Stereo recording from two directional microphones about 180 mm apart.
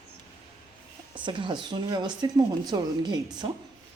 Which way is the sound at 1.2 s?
25° right (ahead or behind).